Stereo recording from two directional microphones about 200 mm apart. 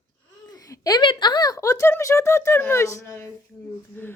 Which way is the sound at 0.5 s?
20° left (ahead or behind).